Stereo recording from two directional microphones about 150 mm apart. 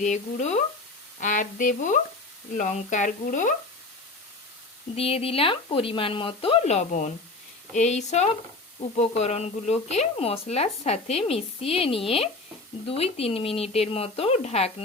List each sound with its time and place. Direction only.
0.0 s speech: 50° left (ahead or behind)
4.9 s speech: 40° left (ahead or behind)